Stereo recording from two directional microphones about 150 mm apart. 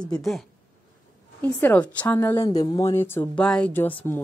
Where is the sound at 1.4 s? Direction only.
10° left (ahead or behind).